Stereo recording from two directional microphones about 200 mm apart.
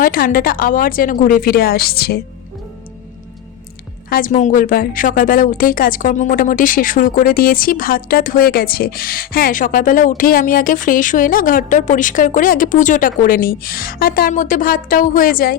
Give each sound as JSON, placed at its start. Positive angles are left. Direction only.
{"t": 0.0, "sound": "a woman's voice", "side_deg": 45}
{"t": 4.1, "sound": "a woman's voice", "side_deg": 40}